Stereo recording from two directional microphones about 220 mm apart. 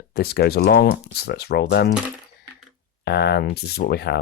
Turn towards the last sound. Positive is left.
turn(degrees=45)  # may be behind; listen again after turning